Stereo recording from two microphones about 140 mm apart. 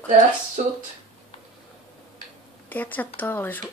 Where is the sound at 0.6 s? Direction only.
65° right (ahead or behind).